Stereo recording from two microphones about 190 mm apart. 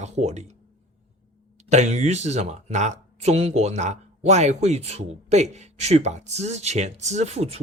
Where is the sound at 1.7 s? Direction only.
35° right (ahead or behind).